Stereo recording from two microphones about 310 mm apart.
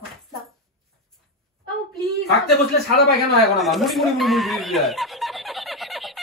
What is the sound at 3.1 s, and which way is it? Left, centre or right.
Chuckle, centre.